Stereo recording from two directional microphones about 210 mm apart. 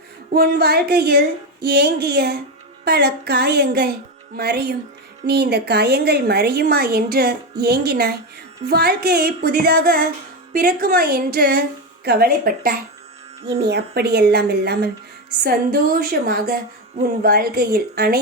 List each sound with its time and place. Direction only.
0.3 s a woman's voice: 45° right (ahead or behind)